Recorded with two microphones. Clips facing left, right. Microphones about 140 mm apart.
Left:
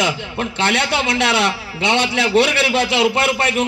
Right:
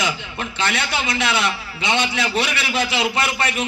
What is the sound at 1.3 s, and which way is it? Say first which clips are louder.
A man's voice: left 4 dB; 70° left (ahead or behind).